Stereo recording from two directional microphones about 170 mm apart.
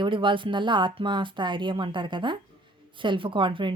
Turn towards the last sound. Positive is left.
turn(degrees=-30)  # may be behind; listen again after turning